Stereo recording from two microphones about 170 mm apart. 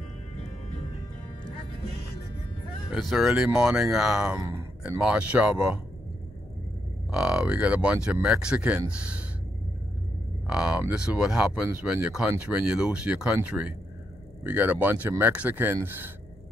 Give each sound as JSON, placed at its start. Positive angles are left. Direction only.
{"t": 2.9, "sound": "speech", "side_deg": 0}
{"t": 4.4, "sound": "a sound", "side_deg": -15}
{"t": 4.9, "sound": "speech", "side_deg": -5}
{"t": 7.1, "sound": "speech", "side_deg": -5}
{"t": 10.4, "sound": "speech", "side_deg": -5}